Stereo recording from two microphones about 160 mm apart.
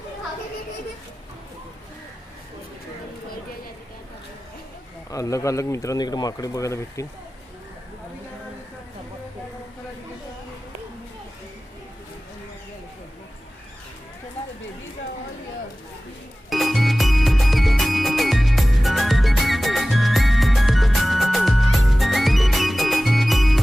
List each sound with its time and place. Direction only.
5.1 s speech: 20° left (ahead or behind)
16.5 s music: centre (ahead or behind)